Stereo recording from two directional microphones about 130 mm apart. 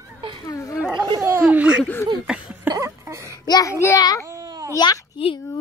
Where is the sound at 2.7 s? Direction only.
25° right (ahead or behind).